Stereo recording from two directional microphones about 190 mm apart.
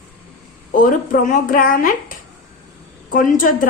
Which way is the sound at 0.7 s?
45° left (ahead or behind).